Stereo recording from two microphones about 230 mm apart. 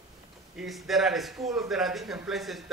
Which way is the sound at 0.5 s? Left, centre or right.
Centre.